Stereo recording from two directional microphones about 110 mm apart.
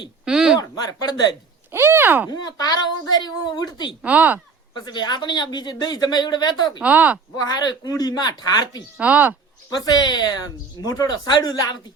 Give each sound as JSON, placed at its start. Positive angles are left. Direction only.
{"t": 0.3, "sound": "a sound", "side_deg": -5}
{"t": 0.6, "sound": "speech", "side_deg": 35}
{"t": 1.7, "sound": "speech", "side_deg": -20}
{"t": 2.3, "sound": "speech", "side_deg": 40}
{"t": 4.0, "sound": "speech", "side_deg": -15}
{"t": 4.7, "sound": "speech", "side_deg": 40}
{"t": 6.8, "sound": "speech", "side_deg": -15}
{"t": 7.3, "sound": "speech", "side_deg": 35}
{"t": 9.0, "sound": "speech", "side_deg": -15}
{"t": 9.6, "sound": "speech", "side_deg": 35}